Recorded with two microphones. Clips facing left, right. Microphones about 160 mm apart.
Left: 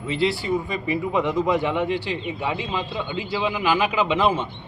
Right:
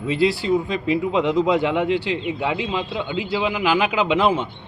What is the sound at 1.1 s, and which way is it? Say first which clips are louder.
A man's voice: right 2 dB; 15° right (ahead or behind).